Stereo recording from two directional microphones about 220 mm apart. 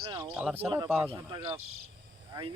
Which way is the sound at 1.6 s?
75° right (ahead or behind).